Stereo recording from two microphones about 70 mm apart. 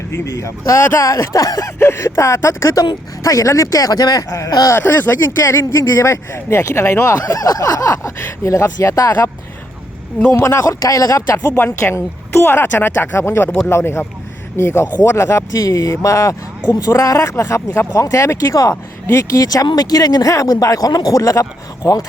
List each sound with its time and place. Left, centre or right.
0.3 s speech: left
1.8 s speech: left
4.7 s speech: left
5.5 s speech: left
10.4 s speech: left
11.3 s speech: left